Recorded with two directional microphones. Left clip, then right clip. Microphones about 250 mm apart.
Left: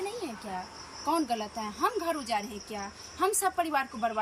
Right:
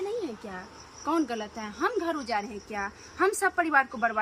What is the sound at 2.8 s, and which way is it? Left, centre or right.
Speech, right.